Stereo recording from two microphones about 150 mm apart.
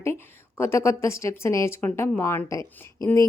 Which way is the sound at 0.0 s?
15° left (ahead or behind).